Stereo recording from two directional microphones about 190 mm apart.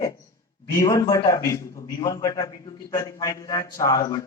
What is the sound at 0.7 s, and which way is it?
A man's voice, 15° left (ahead or behind).